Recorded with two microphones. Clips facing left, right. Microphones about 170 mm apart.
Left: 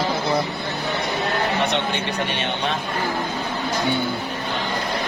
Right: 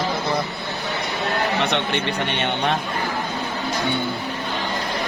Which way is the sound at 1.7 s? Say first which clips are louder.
Right 1 dB; 60° right (ahead or behind).